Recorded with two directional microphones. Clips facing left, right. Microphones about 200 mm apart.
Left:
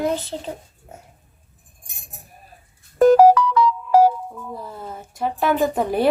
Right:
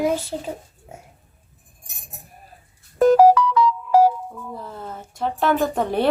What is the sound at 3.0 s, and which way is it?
Music, 55° left (ahead or behind).